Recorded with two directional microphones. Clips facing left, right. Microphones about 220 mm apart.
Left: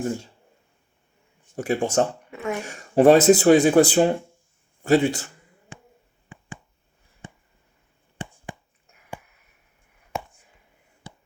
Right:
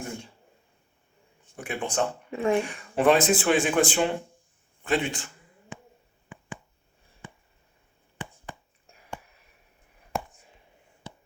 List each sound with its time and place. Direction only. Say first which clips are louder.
1.5 s speech: left 7 dB; 40° left (ahead or behind)
2.3 s speech: right 5 dB; 30° right (ahead or behind)
2.6 s speech: left 7 dB; 40° left (ahead or behind)